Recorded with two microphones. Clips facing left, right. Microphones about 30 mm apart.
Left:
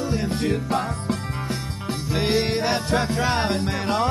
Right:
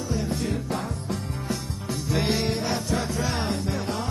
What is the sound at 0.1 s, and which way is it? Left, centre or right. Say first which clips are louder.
Music: left 1 dB; left.